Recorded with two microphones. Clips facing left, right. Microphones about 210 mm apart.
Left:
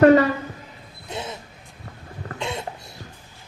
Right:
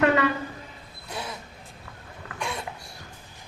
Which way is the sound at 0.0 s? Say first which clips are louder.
Left 8 dB; 40° left (ahead or behind).